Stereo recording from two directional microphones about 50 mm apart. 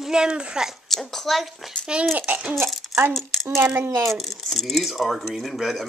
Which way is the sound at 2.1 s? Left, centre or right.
Right.